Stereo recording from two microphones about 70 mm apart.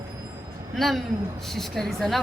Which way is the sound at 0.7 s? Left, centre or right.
Centre.